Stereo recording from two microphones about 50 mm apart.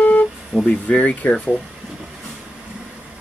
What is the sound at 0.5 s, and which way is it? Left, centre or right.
Speech, centre.